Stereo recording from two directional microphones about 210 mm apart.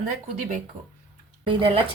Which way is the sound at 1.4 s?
25° right (ahead or behind).